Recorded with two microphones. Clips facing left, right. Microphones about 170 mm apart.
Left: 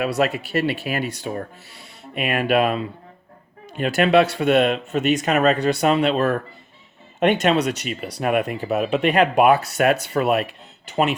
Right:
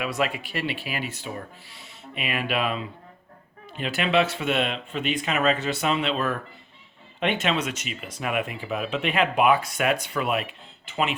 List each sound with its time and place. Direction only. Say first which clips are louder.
0.2 s speech: left 6 dB; 40° left (ahead or behind)